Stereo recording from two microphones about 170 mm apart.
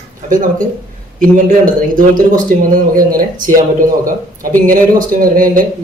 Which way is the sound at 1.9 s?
55° right (ahead or behind).